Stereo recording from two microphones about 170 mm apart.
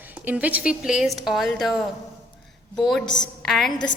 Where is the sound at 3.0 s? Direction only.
25° left (ahead or behind).